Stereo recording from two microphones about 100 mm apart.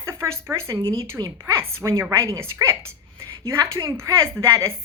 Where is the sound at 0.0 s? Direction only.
30° right (ahead or behind).